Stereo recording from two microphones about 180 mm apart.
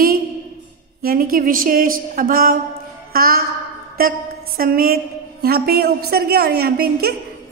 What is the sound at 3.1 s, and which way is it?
Music, 55° right (ahead or behind).